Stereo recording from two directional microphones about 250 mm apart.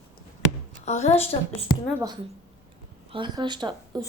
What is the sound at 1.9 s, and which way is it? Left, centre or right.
A woman's voice, centre.